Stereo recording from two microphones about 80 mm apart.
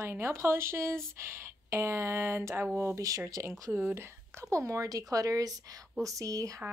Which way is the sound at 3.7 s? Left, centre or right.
Right.